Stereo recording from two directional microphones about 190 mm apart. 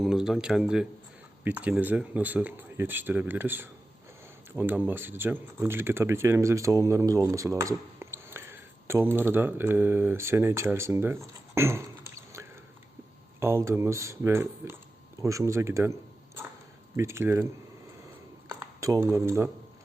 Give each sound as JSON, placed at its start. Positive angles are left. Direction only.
{"t": 0.0, "sound": "a man's voice", "side_deg": 0}
{"t": 18.8, "sound": "speech", "side_deg": -15}